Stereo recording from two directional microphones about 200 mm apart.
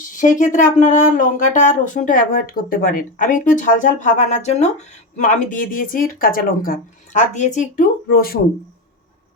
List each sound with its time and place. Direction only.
0.2 s speech: 40° left (ahead or behind)